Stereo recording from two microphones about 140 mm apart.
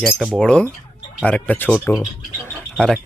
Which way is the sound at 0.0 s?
5° right (ahead or behind).